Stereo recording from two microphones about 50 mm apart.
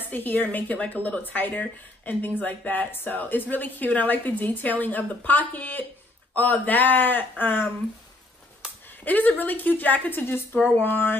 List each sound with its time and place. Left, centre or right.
0.1 s a woman's voice: left
8.8 s a woman's voice: left